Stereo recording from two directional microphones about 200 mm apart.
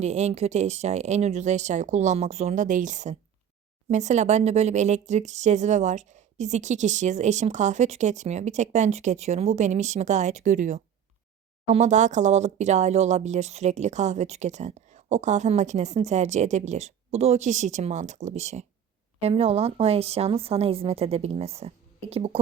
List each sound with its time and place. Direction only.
0.0 s speech: 35° right (ahead or behind)